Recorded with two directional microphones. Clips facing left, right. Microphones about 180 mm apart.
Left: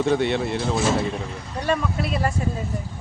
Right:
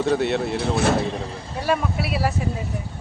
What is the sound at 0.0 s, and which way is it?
Speech, centre (ahead or behind).